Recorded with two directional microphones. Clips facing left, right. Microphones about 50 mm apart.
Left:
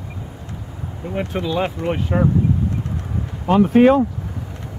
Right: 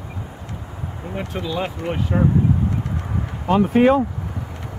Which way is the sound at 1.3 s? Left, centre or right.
Left.